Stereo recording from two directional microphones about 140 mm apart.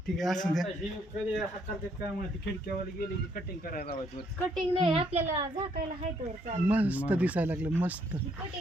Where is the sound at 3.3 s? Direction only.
90° left.